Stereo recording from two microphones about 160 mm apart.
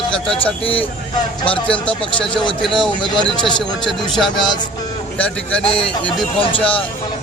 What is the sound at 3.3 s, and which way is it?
Speech, 30° left (ahead or behind).